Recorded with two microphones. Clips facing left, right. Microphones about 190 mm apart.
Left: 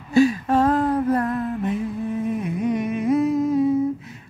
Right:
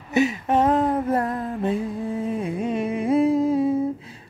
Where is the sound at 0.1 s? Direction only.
20° right (ahead or behind).